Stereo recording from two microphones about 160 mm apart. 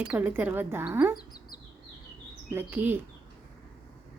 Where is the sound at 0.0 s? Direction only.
10° right (ahead or behind).